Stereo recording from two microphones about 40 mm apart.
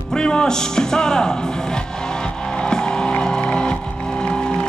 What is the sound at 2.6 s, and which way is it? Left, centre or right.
Music, centre.